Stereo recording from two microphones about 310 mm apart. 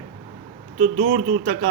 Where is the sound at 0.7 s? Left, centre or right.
Right.